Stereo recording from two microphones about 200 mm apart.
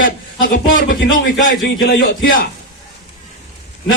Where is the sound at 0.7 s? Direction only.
75° left (ahead or behind).